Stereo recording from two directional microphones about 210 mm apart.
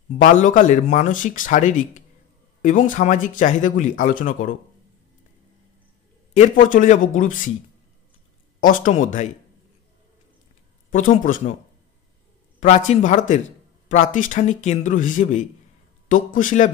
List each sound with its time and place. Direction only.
0.2 s speech: 35° left (ahead or behind)
6.3 s speech: 35° left (ahead or behind)
8.5 s speech: 40° left (ahead or behind)
10.9 s speech: 40° left (ahead or behind)
12.5 s speech: 35° left (ahead or behind)